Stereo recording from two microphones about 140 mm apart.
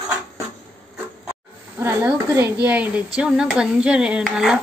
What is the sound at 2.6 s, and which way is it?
Speech, 10° right (ahead or behind).